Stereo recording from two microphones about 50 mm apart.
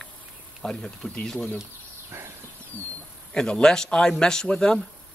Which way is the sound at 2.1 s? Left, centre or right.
Right.